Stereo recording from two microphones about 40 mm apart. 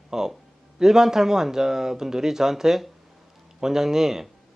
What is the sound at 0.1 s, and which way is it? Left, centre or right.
Speech, centre.